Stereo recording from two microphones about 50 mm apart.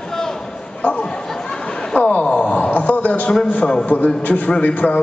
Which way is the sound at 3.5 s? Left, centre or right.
Centre.